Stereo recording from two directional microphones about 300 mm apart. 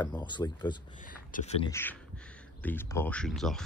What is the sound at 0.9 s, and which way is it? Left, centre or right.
Speech, left.